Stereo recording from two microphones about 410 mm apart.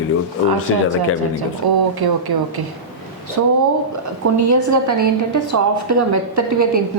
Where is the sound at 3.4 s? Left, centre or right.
Right.